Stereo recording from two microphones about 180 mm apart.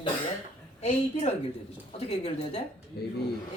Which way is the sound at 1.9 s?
35° left (ahead or behind).